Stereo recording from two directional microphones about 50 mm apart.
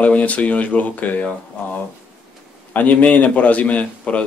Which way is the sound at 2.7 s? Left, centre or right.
Left.